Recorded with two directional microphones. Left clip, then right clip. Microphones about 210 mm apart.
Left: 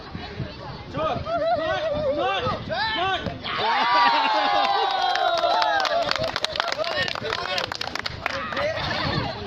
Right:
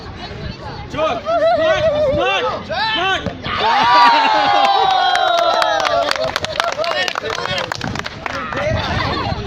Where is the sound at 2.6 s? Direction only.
35° right (ahead or behind).